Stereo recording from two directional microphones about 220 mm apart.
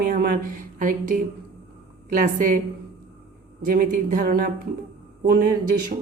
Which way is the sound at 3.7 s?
40° right (ahead or behind).